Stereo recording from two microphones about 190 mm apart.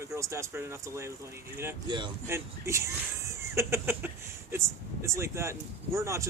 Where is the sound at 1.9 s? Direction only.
25° right (ahead or behind).